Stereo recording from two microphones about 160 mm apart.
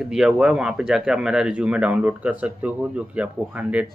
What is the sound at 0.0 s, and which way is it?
Speech, centre (ahead or behind).